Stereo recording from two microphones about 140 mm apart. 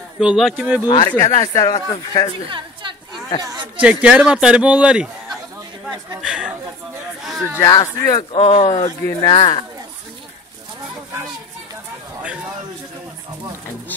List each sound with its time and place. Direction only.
0.2 s speech: 5° right (ahead or behind)
0.8 s speech: 35° left (ahead or behind)
1.1 s speech: 20° left (ahead or behind)
1.9 s speech: 35° left (ahead or behind)
2.5 s chatter: 35° right (ahead or behind)
3.4 s speech: 30° right (ahead or behind)
3.8 s speech: 10° right (ahead or behind)
6.2 s a sound: 5° right (ahead or behind)
7.5 s speech: 25° left (ahead or behind)
8.2 s speech: 40° left (ahead or behind)
8.8 s speech: 25° left (ahead or behind)